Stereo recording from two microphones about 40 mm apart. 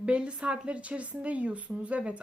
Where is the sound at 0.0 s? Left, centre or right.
Right.